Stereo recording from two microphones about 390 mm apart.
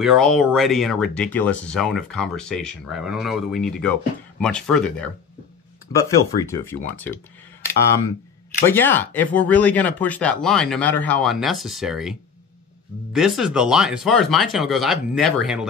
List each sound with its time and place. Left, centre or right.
0.0 s speech: centre
8.6 s speech: centre